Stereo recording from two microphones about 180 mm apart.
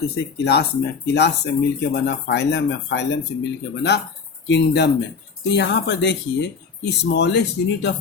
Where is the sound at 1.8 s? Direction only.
70° left (ahead or behind).